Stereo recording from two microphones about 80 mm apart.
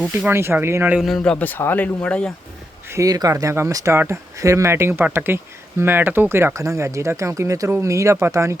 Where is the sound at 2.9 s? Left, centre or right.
Right.